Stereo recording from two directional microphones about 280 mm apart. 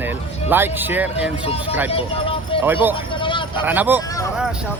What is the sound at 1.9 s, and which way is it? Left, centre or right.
Music, centre.